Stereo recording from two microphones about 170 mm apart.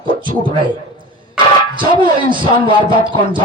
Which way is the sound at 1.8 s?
30° right (ahead or behind).